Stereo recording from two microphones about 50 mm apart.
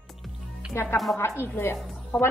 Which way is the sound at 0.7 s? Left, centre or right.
Left.